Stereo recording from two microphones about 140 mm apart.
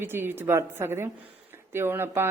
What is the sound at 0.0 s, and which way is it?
Speech, 15° right (ahead or behind).